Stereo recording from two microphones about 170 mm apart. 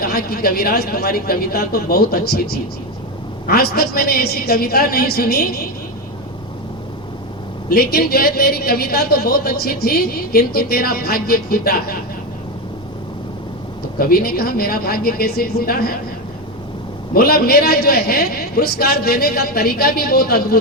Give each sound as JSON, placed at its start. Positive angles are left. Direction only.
{"t": 0.0, "sound": "a woman's voice", "side_deg": 60}
{"t": 7.7, "sound": "a woman's voice", "side_deg": 65}
{"t": 14.0, "sound": "a woman's voice", "side_deg": 60}
{"t": 17.2, "sound": "a woman's voice", "side_deg": 60}